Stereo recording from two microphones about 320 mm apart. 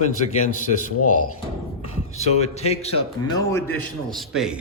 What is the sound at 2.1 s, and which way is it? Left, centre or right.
Speech, centre.